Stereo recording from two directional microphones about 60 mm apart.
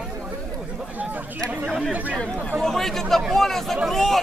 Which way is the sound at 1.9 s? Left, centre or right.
Right.